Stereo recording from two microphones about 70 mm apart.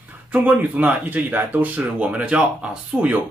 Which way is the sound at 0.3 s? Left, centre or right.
Right.